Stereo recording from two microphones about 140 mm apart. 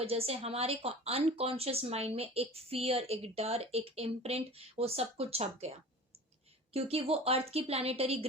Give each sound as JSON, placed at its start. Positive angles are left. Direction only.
{"t": 0.0, "sound": "speech", "side_deg": -45}
{"t": 6.7, "sound": "speech", "side_deg": -45}